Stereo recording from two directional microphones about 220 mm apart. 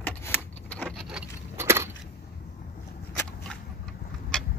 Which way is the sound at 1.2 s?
10° right (ahead or behind).